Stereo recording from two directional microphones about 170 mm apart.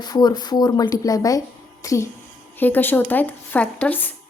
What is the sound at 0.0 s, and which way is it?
A woman's voice, 25° left (ahead or behind).